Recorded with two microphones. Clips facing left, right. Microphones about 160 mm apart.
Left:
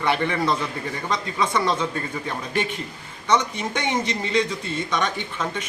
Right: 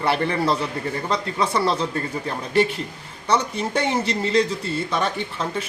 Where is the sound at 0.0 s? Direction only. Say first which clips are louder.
Right 1 dB; 35° right (ahead or behind).